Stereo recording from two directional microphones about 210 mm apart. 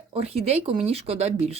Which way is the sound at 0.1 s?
30° right (ahead or behind).